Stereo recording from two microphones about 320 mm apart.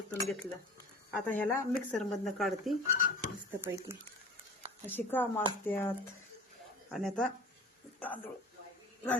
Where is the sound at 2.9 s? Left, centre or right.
Left.